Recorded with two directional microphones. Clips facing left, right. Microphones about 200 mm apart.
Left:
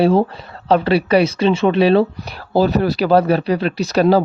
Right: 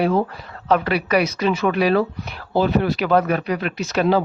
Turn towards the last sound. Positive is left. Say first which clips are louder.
# left 5 dB
turn(degrees=35)  # may be behind; listen again after turning